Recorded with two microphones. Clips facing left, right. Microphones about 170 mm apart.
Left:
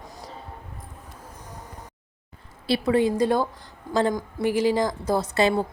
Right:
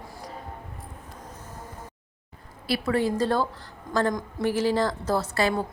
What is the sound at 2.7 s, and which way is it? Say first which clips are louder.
A woman's voice: left 4 dB; 20° left (ahead or behind).